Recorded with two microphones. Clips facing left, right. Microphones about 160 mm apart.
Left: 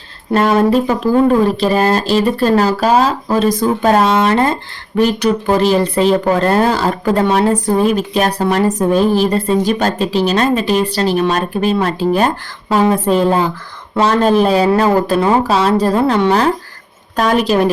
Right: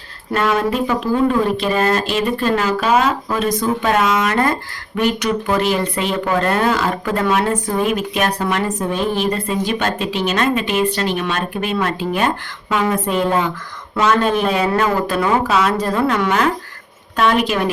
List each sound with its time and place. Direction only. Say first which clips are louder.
0.3 s speech: left 6 dB; 35° left (ahead or behind)